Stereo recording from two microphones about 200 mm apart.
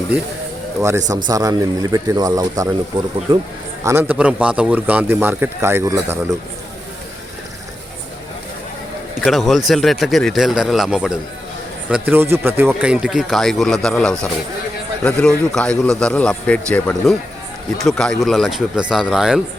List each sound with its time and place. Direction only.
1.3 s a man's voice: 15° right (ahead or behind)
3.8 s a man's voice: 10° right (ahead or behind)
9.2 s a man's voice: centre (ahead or behind)